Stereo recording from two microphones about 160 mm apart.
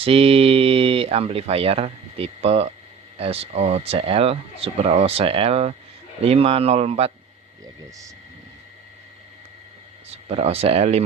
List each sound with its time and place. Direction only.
0.0 s speech: 35° right (ahead or behind)
7.6 s speech: 20° right (ahead or behind)
10.1 s speech: 40° right (ahead or behind)